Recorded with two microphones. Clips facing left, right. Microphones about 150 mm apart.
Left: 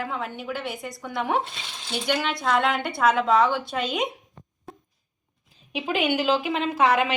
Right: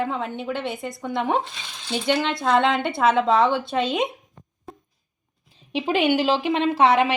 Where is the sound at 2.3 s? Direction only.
25° right (ahead or behind).